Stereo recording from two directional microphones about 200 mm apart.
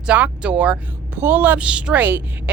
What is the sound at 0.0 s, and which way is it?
A woman's voice, 5° right (ahead or behind).